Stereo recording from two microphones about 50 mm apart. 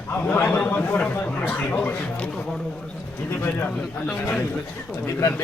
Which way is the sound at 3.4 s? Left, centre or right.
Left.